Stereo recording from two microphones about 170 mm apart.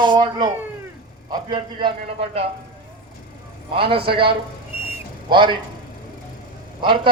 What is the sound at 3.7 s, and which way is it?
A man's voice, 30° right (ahead or behind).